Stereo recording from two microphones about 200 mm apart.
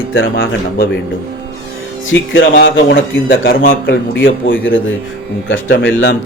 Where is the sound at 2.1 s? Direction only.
65° left (ahead or behind).